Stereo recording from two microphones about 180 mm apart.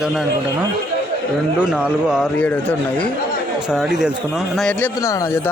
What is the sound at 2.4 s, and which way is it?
A man's voice, 10° left (ahead or behind).